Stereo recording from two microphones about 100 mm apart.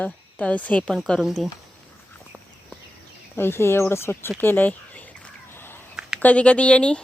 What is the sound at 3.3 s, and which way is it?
Speech, 25° left (ahead or behind).